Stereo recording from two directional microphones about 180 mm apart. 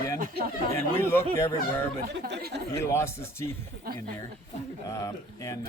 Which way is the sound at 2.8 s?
15° left (ahead or behind).